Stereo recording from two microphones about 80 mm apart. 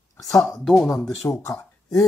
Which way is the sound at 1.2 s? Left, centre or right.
Left.